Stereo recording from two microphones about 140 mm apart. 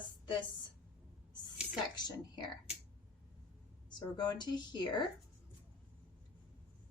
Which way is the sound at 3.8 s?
30° left (ahead or behind).